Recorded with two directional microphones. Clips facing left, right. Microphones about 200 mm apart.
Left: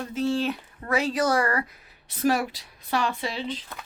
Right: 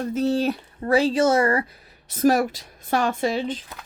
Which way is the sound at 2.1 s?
45° right (ahead or behind).